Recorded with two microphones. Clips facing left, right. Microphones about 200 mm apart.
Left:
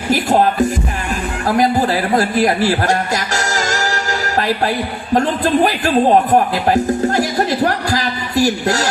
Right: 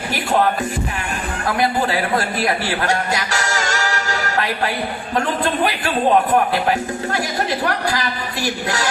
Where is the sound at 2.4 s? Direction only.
40° left (ahead or behind).